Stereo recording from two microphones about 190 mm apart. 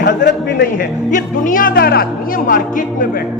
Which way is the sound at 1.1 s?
45° left (ahead or behind).